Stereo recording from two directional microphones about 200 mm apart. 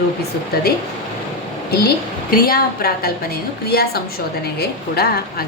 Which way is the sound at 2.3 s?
50° left (ahead or behind).